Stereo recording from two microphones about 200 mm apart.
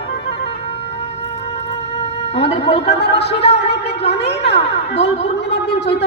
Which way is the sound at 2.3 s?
60° left (ahead or behind).